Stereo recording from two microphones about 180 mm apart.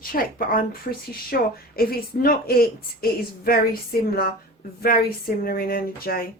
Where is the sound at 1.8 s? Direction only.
55° left (ahead or behind).